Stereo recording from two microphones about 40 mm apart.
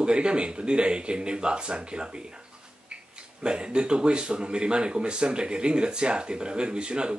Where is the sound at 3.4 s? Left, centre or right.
Right.